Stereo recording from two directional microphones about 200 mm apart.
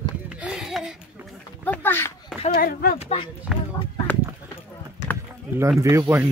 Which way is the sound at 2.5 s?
50° left (ahead or behind).